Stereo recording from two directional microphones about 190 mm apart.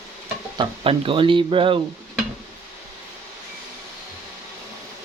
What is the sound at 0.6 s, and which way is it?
Speech, 30° right (ahead or behind).